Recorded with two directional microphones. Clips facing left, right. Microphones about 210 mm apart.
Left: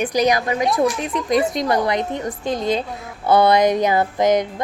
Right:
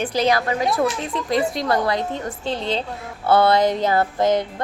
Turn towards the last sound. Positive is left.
turn(degrees=15)  # may be behind; listen again after turning